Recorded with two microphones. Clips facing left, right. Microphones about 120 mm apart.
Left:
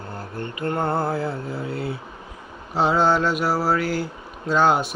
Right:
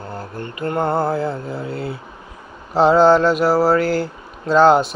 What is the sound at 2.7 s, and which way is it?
Mantra, 35° right (ahead or behind).